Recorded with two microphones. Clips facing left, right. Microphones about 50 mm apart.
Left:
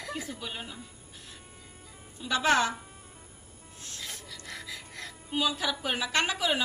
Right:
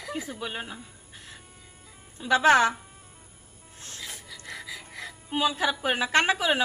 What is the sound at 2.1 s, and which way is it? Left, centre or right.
Speech, right.